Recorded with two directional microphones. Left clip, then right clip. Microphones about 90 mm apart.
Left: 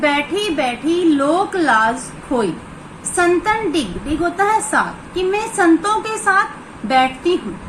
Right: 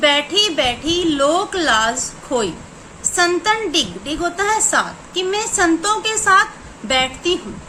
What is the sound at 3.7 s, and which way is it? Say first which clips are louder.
Speech: right 1 dB; 55° right (ahead or behind).